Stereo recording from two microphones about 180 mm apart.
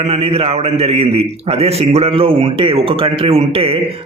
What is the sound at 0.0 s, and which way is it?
A man's voice, 35° right (ahead or behind).